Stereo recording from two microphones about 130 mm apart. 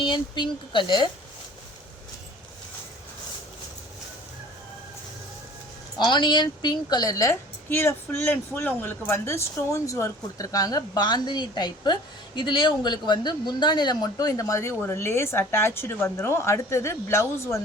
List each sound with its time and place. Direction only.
0.0 s speech: 40° left (ahead or behind)
6.0 s a woman's voice: 35° left (ahead or behind)